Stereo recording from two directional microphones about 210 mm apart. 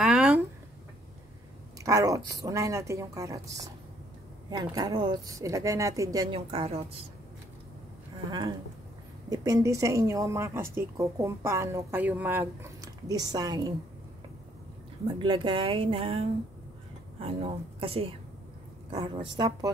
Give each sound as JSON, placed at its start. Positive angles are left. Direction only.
{"t": 0.0, "sound": "a sound", "side_deg": -5}
{"t": 1.8, "sound": "a woman's voice", "side_deg": -15}
{"t": 8.3, "sound": "a woman's voice", "side_deg": -20}
{"t": 15.1, "sound": "speech", "side_deg": -25}